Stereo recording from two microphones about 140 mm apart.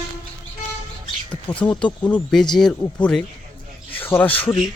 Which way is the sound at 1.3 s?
10° left (ahead or behind).